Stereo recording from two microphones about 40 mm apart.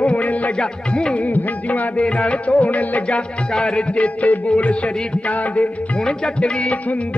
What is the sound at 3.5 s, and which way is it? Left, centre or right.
Music, left.